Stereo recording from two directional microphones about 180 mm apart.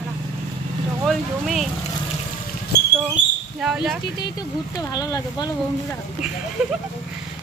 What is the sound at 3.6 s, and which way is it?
Speech, centre (ahead or behind).